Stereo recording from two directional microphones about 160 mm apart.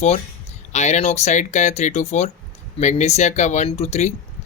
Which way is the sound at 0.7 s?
45° left (ahead or behind).